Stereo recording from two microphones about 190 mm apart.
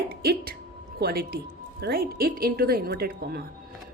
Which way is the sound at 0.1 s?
55° right (ahead or behind).